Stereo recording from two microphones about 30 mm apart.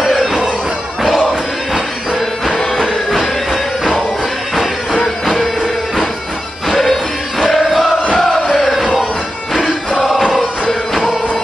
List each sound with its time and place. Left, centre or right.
0.0 s a sound: centre
1.7 s music: centre
2.5 s music: centre
6.7 s music: centre
8.5 s crowd: centre
9.9 s a sound: centre